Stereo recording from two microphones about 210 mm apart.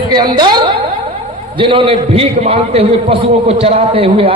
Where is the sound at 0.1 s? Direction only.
20° right (ahead or behind).